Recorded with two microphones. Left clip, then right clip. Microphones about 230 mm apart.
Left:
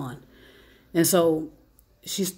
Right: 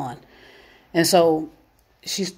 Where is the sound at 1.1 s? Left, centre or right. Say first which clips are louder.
Right 5 dB; right.